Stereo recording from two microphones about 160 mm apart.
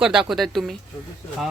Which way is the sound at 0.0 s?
5° right (ahead or behind).